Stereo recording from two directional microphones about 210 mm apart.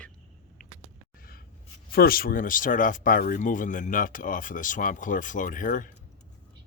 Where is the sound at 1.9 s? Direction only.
45° left (ahead or behind).